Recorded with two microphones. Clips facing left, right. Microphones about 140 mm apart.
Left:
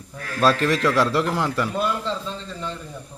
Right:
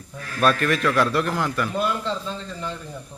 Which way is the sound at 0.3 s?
25° left (ahead or behind).